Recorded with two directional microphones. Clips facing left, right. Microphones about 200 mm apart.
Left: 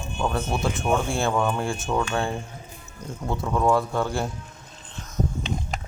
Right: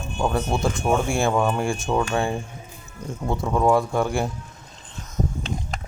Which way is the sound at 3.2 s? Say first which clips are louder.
Right 2 dB; 20° right (ahead or behind).